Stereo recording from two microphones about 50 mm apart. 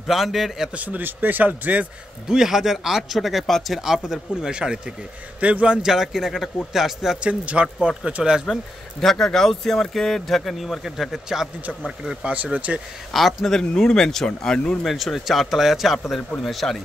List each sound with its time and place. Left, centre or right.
0.1 s speech: centre
0.7 s speech: right
2.2 s speech: centre; by 5.8 s right
5.8 s speech: centre
7.2 s speech: right
9.0 s speech: centre
12.2 s speech: right
13.1 s speech: centre
13.6 s speech: centre
14.9 s speech: centre